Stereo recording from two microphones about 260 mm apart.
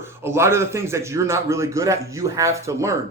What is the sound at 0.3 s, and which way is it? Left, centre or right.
Speech, centre.